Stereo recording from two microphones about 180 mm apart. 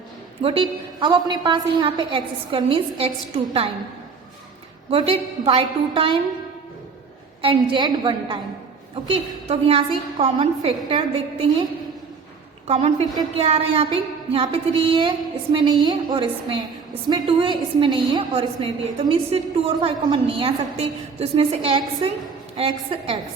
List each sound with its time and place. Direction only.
0.4 s a woman's voice: 25° right (ahead or behind)
4.9 s a woman's voice: 30° right (ahead or behind)
7.4 s a woman's voice: 25° right (ahead or behind)
12.6 s a woman's voice: 35° right (ahead or behind)